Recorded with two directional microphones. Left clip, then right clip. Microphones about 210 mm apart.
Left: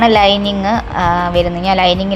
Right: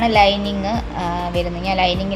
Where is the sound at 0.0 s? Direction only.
20° left (ahead or behind).